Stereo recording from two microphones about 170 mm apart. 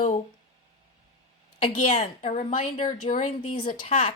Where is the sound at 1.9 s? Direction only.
45° left (ahead or behind).